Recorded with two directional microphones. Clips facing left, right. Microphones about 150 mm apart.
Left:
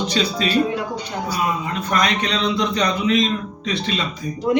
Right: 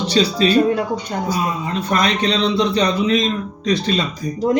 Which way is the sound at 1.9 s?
35° right (ahead or behind).